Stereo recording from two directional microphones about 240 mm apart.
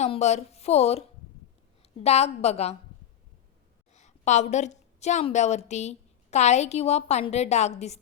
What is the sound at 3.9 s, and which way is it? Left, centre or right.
A woman's voice, left.